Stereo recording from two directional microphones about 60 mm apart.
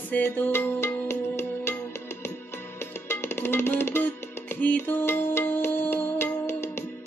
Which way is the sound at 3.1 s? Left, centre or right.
Left.